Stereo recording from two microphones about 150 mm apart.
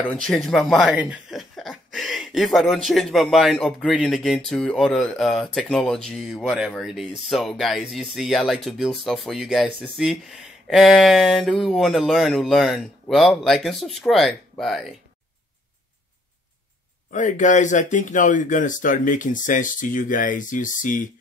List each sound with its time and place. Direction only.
0.1 s speech: 5° left (ahead or behind)
17.1 s speech: 55° left (ahead or behind)